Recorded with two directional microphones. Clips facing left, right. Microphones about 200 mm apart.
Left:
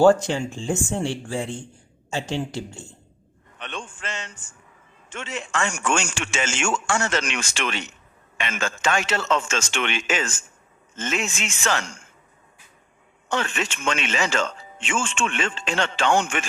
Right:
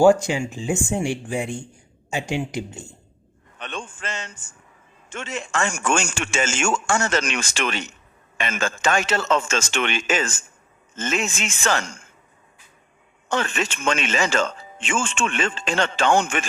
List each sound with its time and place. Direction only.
0.0 s a man's voice: 10° right (ahead or behind)
3.6 s a sound: 40° right (ahead or behind)
5.0 s a man's voice: 45° right (ahead or behind)
13.3 s speech: 40° right (ahead or behind)